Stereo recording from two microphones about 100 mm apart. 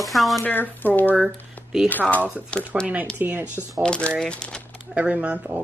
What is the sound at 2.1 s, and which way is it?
A woman's voice, 15° right (ahead or behind).